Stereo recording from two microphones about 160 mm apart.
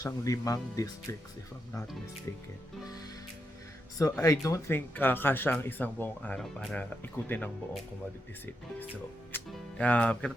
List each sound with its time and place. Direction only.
0.0 s speech: 20° left (ahead or behind)
3.9 s speech: 20° left (ahead or behind)
9.5 s speech: 10° left (ahead or behind)